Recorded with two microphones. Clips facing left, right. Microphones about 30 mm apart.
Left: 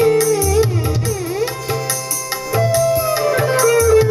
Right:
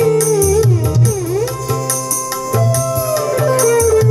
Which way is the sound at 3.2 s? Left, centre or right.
Left.